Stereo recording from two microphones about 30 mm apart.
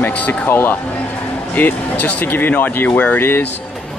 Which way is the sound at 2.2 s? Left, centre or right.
Left.